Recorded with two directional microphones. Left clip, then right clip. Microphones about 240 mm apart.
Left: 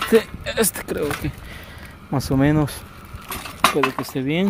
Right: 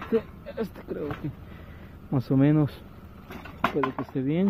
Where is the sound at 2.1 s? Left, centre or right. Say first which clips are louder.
Left 4 dB; centre.